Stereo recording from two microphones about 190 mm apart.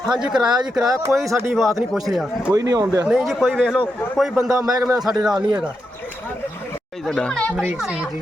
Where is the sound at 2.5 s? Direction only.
20° right (ahead or behind).